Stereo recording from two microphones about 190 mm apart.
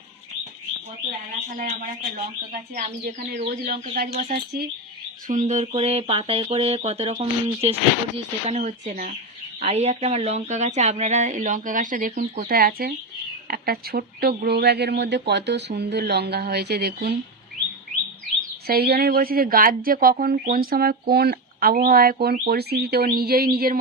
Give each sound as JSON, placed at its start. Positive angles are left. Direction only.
{"t": 1.5, "sound": "speech", "side_deg": -45}
{"t": 5.3, "sound": "speech", "side_deg": -40}
{"t": 18.7, "sound": "speech", "side_deg": -55}